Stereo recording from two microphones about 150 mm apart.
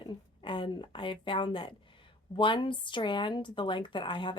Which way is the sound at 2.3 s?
30° left (ahead or behind).